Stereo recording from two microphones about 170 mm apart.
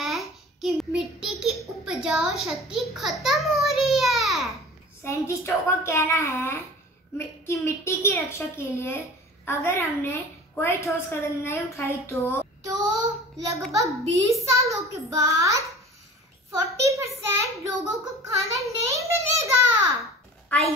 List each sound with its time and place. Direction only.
0.0 s child singing: centre (ahead or behind)
1.7 s a sound: 5° right (ahead or behind)
5.0 s a woman's voice: 15° left (ahead or behind)
12.6 s child singing: 20° right (ahead or behind)
13.7 s a child's voice: 20° right (ahead or behind)
20.0 s babbling: centre (ahead or behind)